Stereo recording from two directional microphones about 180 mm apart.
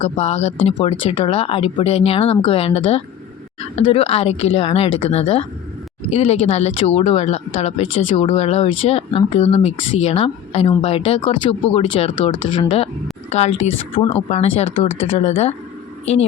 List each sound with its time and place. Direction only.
0.2 s speech: 35° left (ahead or behind)